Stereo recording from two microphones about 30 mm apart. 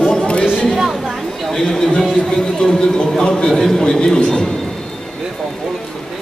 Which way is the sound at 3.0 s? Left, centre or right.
Left.